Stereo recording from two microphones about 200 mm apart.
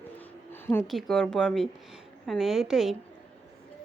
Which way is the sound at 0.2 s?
10° left (ahead or behind).